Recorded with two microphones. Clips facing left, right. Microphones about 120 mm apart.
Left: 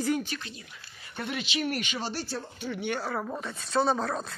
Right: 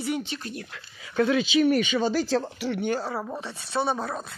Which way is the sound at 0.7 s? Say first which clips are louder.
Right 6 dB; 90° right.